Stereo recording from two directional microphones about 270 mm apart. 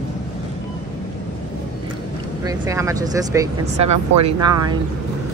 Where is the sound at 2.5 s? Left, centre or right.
Centre.